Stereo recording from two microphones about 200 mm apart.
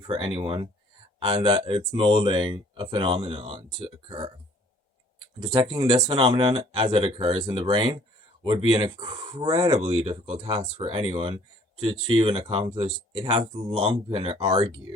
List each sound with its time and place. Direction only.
0.0 s speech: 25° right (ahead or behind)
5.4 s speech: 25° right (ahead or behind)